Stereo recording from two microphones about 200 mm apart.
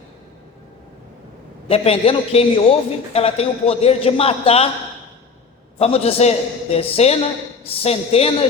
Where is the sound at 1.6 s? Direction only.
30° left (ahead or behind).